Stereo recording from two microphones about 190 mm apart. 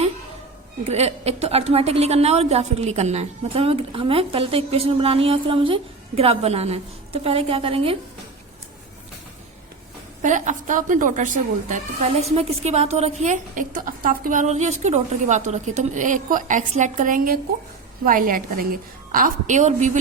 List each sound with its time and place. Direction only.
0.9 s a woman's voice: 35° right (ahead or behind)
10.2 s a woman's voice: 40° right (ahead or behind)